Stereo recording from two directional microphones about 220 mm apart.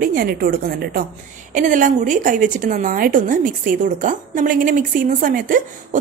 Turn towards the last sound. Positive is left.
turn(degrees=-40)  # may be behind; listen again after turning